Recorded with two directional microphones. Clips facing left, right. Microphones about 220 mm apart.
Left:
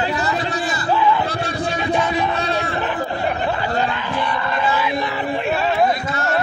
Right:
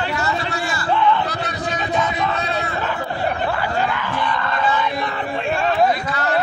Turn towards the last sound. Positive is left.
turn(degrees=5)  # may be behind; listen again after turning